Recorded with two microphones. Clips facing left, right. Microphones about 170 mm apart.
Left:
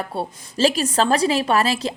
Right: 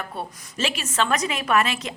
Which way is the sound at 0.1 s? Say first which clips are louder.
Left 6 dB; 30° left (ahead or behind).